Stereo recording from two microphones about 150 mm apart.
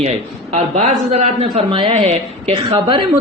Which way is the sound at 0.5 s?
50° right (ahead or behind).